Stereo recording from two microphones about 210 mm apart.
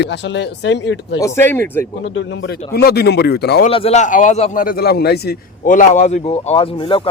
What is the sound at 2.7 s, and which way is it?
Speech, 50° left (ahead or behind).